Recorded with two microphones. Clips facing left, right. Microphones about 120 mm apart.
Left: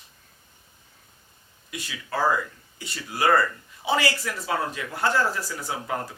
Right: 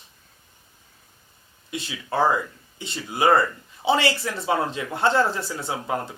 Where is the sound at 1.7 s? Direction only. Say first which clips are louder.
Right 4 dB; 25° right (ahead or behind).